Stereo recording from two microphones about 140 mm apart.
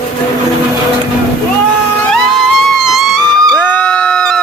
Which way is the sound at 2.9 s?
Centre (ahead or behind).